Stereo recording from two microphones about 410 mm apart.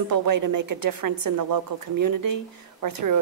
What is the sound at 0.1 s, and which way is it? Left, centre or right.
A woman's voice, right.